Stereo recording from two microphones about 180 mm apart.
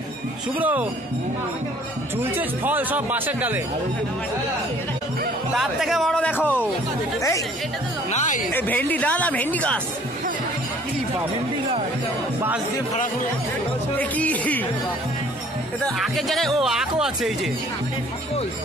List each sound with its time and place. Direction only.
0.6 s speech: 10° right (ahead or behind)
2.1 s speech: 10° right (ahead or behind)
5.5 s speech: centre (ahead or behind); by 7.4 s 15° left (ahead or behind)
8.1 s speech: 45° left (ahead or behind)
8.5 s speech: 10° left (ahead or behind)
13.9 s speech: 10° left (ahead or behind)
15.8 s speech: centre (ahead or behind)